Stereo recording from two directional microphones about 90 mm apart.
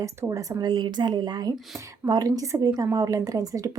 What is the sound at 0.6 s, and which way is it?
A woman's voice, 55° right (ahead or behind).